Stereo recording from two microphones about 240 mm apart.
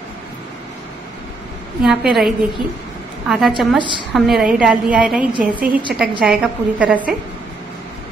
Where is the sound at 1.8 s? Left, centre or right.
Centre.